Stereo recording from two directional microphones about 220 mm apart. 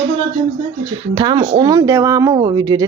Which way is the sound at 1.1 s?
20° right (ahead or behind).